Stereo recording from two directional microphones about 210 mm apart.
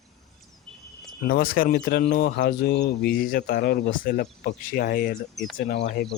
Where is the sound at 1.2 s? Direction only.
45° left (ahead or behind).